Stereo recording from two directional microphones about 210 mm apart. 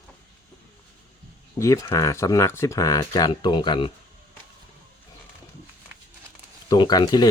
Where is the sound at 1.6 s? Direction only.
15° left (ahead or behind).